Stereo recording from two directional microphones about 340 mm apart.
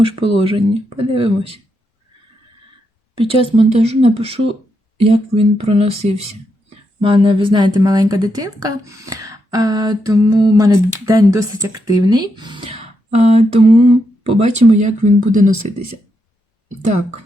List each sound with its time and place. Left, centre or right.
0.0 s a woman's voice: centre
3.2 s a woman's voice: centre